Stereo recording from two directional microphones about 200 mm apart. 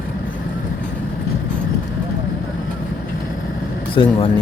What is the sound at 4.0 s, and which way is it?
Speech, 25° left (ahead or behind).